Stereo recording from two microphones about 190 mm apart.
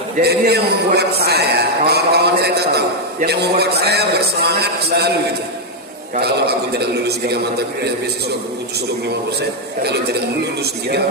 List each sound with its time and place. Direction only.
0.2 s a man's voice: 60° right (ahead or behind)
6.1 s a man's voice: 60° right (ahead or behind)
9.8 s a man's voice: 60° right (ahead or behind)